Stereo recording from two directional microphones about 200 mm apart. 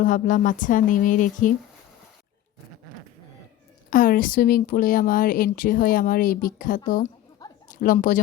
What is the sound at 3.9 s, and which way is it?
Speech, 45° left (ahead or behind).